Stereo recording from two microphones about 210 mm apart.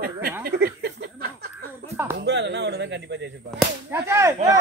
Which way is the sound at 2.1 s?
55° right (ahead or behind).